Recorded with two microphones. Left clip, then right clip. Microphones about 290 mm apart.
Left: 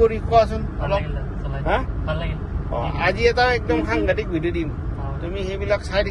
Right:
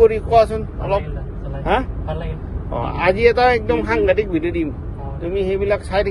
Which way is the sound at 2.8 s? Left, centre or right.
Right.